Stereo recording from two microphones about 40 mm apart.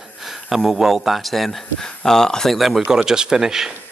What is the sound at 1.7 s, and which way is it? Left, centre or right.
Speech, centre.